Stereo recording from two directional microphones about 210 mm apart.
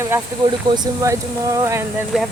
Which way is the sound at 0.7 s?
15° right (ahead or behind).